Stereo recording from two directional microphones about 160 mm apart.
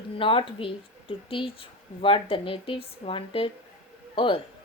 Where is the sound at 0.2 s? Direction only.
35° left (ahead or behind).